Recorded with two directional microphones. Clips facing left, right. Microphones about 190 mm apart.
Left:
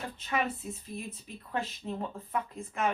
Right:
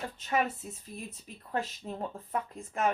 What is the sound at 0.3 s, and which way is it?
Speech, 45° right (ahead or behind).